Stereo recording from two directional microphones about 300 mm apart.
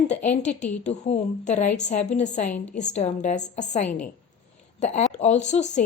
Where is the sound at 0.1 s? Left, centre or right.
Left.